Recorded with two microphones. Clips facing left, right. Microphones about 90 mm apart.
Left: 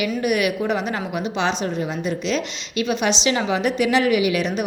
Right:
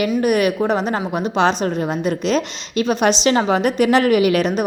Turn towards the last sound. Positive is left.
turn(degrees=-45)  # may be behind; listen again after turning